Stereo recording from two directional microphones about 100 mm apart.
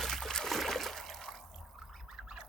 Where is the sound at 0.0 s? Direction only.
5° left (ahead or behind).